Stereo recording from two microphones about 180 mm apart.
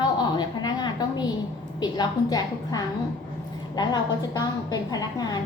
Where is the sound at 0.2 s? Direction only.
25° left (ahead or behind).